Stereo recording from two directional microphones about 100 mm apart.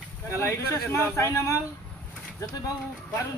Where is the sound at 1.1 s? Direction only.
30° left (ahead or behind).